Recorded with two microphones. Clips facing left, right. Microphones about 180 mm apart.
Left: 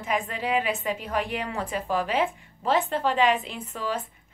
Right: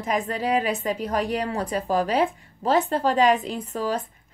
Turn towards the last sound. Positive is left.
turn(degrees=-40)  # may be behind; listen again after turning